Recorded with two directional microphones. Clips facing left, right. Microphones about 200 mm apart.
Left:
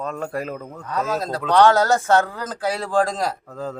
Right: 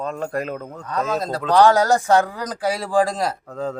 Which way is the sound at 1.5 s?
10° right (ahead or behind).